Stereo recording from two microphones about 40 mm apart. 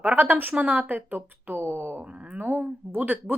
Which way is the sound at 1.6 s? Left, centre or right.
Right.